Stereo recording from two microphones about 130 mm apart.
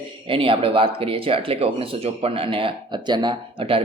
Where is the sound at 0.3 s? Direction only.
45° right (ahead or behind).